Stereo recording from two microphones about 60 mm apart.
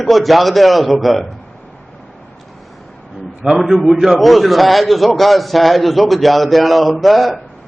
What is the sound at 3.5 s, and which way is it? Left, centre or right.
A man's voice, centre.